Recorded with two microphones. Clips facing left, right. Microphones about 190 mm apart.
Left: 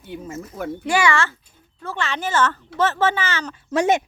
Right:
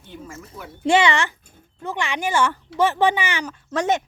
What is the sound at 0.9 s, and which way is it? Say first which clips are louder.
Speech: right 3 dB; 25° right (ahead or behind).